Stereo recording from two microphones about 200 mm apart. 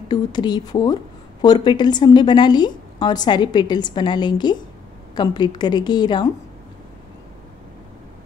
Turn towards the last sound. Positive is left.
turn(degrees=20)  # may be behind; listen again after turning